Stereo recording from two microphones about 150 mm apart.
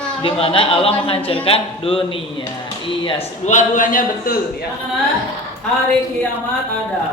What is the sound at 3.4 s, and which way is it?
Speech, 55° left (ahead or behind).